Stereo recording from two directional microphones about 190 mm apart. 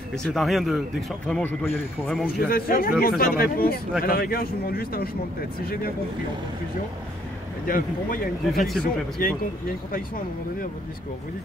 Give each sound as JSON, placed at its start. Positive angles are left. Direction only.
{"t": 0.1, "sound": "speech", "side_deg": 0}
{"t": 2.4, "sound": "speech", "side_deg": 50}
{"t": 7.6, "sound": "speech", "side_deg": 45}
{"t": 8.5, "sound": "speech", "side_deg": 0}
{"t": 9.2, "sound": "speech", "side_deg": 45}